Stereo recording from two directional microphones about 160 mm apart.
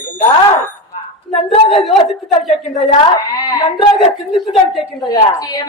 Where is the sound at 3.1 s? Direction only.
25° left (ahead or behind).